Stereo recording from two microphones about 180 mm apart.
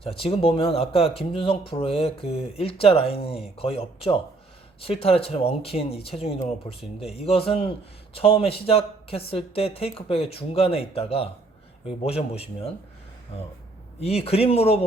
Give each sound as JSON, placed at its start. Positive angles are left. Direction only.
{"t": 0.0, "sound": "speech", "side_deg": 30}
{"t": 14.0, "sound": "speech", "side_deg": 35}